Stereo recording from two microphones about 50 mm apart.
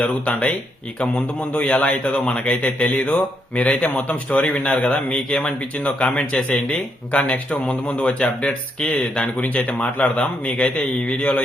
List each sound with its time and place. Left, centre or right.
0.0 s speech: left
8.4 s speech: centre